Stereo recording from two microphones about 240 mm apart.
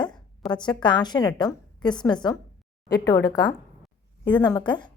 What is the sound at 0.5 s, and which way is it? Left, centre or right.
A woman's voice, centre.